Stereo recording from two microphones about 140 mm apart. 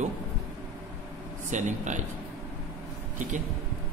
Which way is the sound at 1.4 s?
60° right (ahead or behind).